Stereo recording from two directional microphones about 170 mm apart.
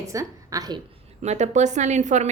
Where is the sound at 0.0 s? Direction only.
20° right (ahead or behind).